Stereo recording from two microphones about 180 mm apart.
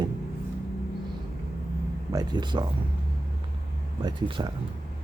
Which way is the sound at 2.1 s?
20° right (ahead or behind).